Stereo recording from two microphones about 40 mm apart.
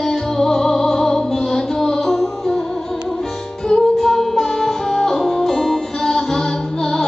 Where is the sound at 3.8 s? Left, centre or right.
Centre.